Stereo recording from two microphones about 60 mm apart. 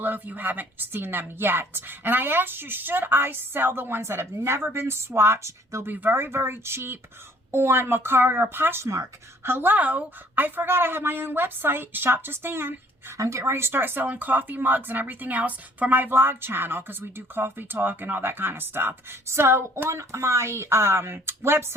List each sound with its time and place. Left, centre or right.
0.0 s speech: right
5.8 s speech: right
13.1 s speech: right
13.4 s speech: right